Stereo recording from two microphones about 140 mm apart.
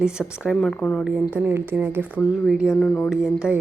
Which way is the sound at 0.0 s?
5° right (ahead or behind).